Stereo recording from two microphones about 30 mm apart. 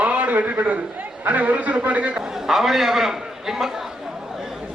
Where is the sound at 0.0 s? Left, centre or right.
Right.